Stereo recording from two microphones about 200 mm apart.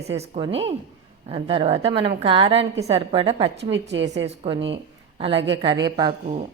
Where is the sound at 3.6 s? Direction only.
60° right (ahead or behind).